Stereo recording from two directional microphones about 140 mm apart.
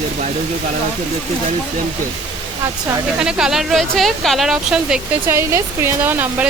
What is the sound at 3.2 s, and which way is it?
Speech, 5° right (ahead or behind).